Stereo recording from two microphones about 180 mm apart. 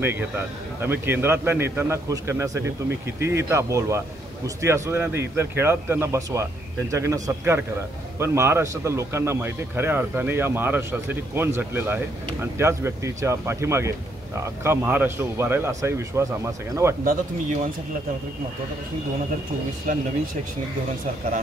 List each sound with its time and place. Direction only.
0.8 s a man's voice: 10° right (ahead or behind)
17.0 s speech: 45° right (ahead or behind)